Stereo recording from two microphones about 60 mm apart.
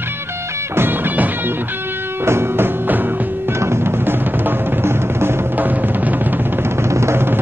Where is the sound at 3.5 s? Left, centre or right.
Right.